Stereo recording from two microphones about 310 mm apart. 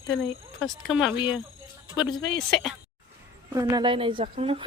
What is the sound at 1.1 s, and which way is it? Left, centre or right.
Speech, centre.